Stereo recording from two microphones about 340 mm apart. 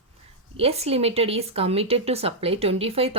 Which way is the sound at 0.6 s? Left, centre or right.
Centre.